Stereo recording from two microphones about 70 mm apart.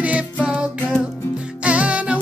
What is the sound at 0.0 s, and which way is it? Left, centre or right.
Music, centre.